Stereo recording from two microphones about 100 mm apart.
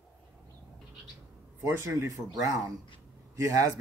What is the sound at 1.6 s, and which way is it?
Speech, 30° right (ahead or behind).